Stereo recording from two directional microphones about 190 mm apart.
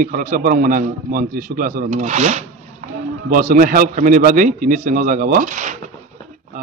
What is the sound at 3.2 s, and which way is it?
Speech, 45° right (ahead or behind).